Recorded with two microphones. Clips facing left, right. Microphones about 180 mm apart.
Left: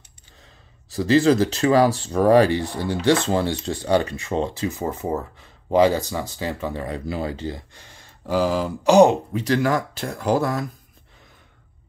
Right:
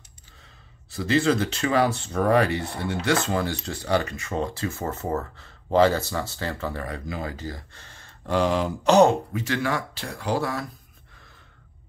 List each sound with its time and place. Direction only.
0.8 s speech: 35° left (ahead or behind); by 9.1 s 10° left (ahead or behind)
9.3 s speech: 40° left (ahead or behind)